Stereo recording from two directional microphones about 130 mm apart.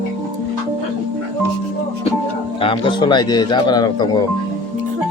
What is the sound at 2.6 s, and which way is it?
Speech, 40° left (ahead or behind).